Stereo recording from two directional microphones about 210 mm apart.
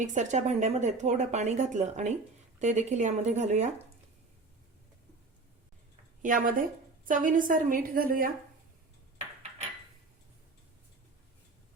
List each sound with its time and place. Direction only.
0.0 s speech: 35° right (ahead or behind)
6.2 s speech: 40° right (ahead or behind)